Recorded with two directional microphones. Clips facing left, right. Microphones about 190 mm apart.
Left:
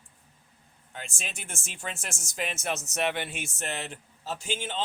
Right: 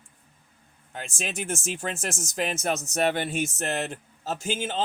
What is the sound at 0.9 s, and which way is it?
A man's voice, 45° right (ahead or behind).